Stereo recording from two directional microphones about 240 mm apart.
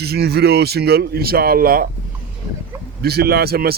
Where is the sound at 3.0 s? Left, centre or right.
Right.